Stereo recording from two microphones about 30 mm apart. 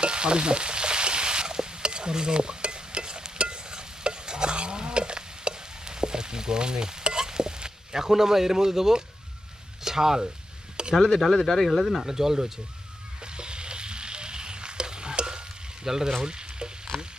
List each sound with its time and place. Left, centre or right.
0.0 s frying: right
9.8 s speech: centre
10.9 s speech: centre
12.0 s speech: centre
13.2 s a sound: right
15.9 s speech: right
16.2 s frying: right